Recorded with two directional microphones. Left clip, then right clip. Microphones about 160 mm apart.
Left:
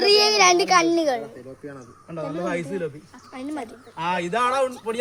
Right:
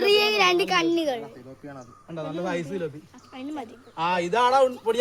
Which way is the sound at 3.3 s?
15° left (ahead or behind).